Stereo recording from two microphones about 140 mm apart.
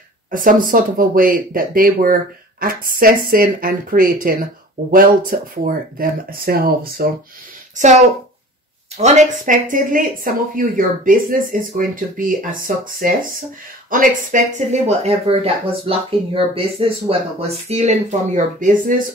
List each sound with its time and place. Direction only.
0.3 s speech: 75° right (ahead or behind)
8.9 s speech: 55° right (ahead or behind)